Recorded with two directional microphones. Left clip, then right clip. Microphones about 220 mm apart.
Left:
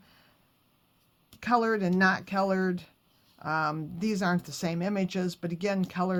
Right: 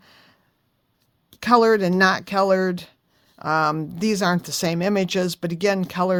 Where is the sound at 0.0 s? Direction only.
50° right (ahead or behind).